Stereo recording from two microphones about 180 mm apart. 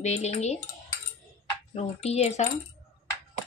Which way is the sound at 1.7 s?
35° left (ahead or behind).